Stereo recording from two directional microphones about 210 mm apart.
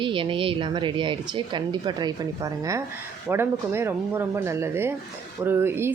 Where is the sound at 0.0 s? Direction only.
25° right (ahead or behind).